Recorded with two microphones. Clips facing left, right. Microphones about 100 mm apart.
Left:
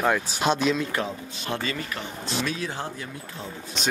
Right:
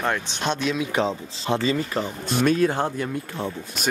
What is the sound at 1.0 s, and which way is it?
Speech, 25° right (ahead or behind).